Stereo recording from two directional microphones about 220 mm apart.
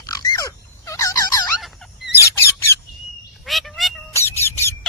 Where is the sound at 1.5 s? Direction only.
Centre (ahead or behind).